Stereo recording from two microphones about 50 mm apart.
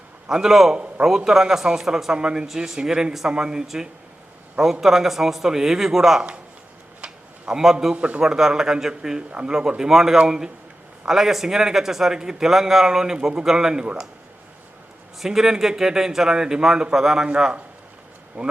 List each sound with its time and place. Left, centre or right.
0.3 s a man's voice: centre
7.0 s a sound: centre
7.9 s speech: right
8.2 s a man's voice: centre
15.2 s a man's voice: centre; by 18.5 s right